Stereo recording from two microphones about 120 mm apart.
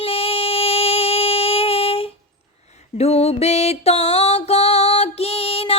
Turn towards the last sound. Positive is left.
turn(degrees=55)  # may be behind; listen again after turning